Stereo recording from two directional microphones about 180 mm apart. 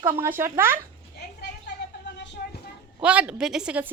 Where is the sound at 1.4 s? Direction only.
70° left (ahead or behind).